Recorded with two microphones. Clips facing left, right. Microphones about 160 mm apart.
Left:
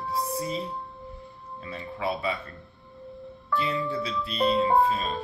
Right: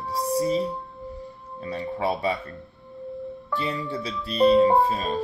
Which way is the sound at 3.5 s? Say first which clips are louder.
Left 1 dB; 35° right (ahead or behind).